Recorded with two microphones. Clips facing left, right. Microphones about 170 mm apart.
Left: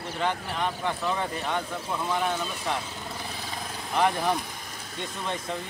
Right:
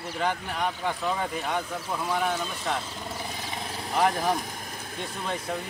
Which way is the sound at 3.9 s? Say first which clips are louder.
Even; 5° right (ahead or behind).